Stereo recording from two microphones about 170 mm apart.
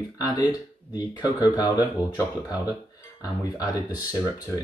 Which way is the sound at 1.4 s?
20° left (ahead or behind).